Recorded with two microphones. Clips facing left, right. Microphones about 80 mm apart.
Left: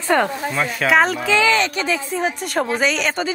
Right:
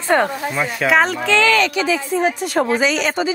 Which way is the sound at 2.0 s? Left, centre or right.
Right.